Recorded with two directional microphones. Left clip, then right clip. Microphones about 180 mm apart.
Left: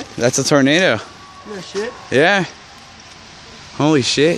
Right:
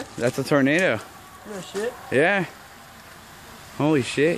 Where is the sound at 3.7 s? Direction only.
20° left (ahead or behind).